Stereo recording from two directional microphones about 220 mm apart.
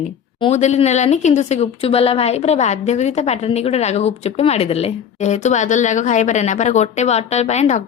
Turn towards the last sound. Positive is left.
turn(degrees=30)  # may be behind; listen again after turning